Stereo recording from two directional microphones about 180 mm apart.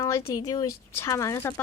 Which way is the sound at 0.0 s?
15° left (ahead or behind).